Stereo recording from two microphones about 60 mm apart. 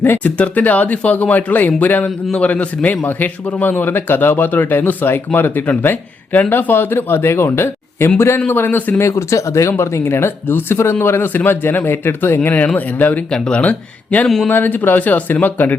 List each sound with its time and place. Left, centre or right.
0.2 s speech: left
9.0 s speech: left
12.4 s speech: left
13.3 s speech: centre
13.6 s speech: left